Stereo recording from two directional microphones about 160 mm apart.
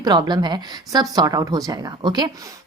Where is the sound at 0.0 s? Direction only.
25° right (ahead or behind).